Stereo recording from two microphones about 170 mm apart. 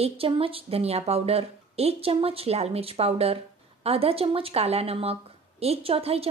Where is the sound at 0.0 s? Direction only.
35° right (ahead or behind).